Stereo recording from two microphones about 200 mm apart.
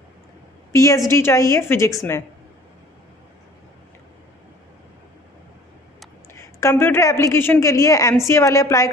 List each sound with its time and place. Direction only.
0.7 s a woman's voice: 15° left (ahead or behind)
6.3 s a woman's voice: 15° left (ahead or behind)